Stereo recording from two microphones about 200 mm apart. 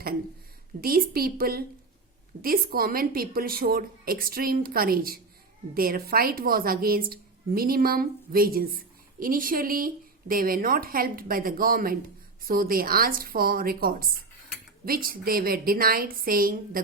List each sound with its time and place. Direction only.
0.8 s a woman's voice: 50° right (ahead or behind)